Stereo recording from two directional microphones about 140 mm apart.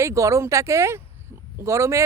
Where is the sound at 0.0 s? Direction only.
20° right (ahead or behind).